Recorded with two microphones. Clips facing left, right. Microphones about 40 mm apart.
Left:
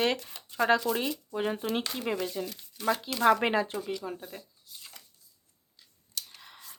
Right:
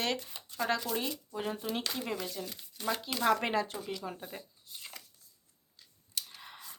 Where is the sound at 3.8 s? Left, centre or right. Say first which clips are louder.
Left 4 dB; centre.